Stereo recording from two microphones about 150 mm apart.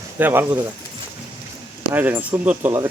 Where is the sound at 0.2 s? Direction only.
15° right (ahead or behind).